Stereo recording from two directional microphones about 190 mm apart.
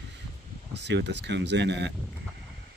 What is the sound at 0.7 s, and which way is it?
Speech, 65° right (ahead or behind).